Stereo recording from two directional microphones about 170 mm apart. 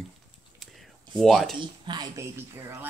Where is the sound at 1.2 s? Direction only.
Centre (ahead or behind).